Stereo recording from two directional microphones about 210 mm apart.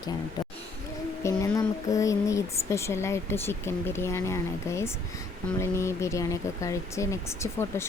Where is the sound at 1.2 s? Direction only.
15° left (ahead or behind).